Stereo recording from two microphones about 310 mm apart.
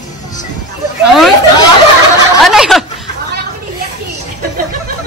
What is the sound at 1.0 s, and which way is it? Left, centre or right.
Speech, centre.